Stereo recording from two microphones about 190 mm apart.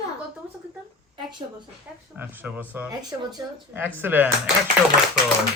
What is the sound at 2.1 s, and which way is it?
Speech, 10° right (ahead or behind).